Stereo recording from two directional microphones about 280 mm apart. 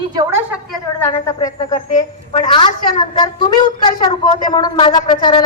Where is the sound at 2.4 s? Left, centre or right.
Centre.